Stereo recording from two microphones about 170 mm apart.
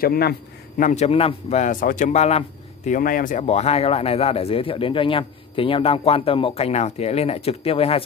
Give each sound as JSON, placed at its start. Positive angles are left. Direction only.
{"t": 0.0, "sound": "a man's voice", "side_deg": 65}